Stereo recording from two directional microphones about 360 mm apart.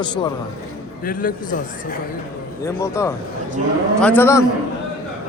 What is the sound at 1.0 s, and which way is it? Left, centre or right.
Speech, left.